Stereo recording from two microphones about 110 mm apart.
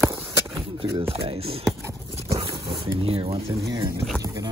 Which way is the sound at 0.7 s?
55° right (ahead or behind).